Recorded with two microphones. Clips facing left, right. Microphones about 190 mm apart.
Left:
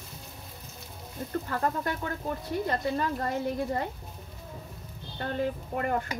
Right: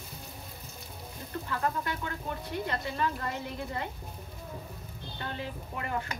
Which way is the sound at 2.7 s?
40° left (ahead or behind).